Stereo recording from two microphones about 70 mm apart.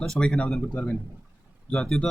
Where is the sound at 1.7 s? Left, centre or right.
Centre.